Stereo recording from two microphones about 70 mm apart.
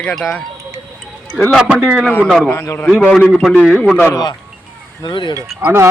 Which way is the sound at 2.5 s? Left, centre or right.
Left.